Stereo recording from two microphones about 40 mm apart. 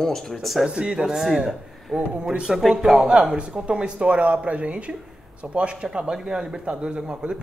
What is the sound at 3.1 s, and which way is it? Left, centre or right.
Speech, right.